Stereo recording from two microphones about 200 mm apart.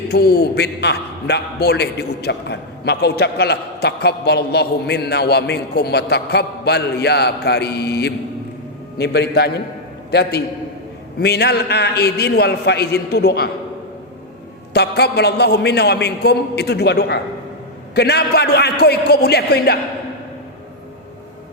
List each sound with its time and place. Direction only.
0.1 s a man's voice: 50° left (ahead or behind)
14.7 s a man's voice: 55° left (ahead or behind)